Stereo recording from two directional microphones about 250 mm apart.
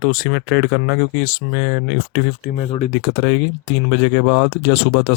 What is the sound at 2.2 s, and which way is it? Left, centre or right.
Speech, left.